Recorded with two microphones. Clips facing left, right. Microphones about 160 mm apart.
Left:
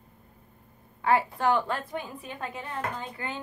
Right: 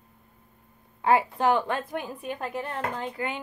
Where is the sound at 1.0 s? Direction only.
20° right (ahead or behind).